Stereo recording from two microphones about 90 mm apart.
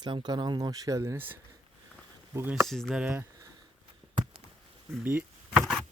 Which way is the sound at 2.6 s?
5° left (ahead or behind).